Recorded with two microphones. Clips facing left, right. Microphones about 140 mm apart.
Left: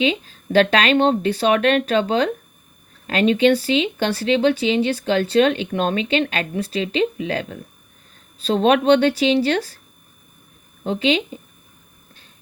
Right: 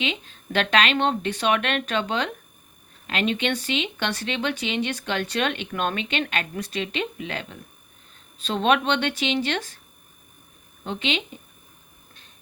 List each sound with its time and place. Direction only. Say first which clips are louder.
0.0 s speech: left 9 dB; 35° left (ahead or behind)
10.8 s speech: left 8 dB; 35° left (ahead or behind)